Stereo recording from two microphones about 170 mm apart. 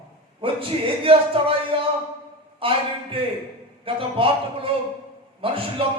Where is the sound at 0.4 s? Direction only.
35° right (ahead or behind).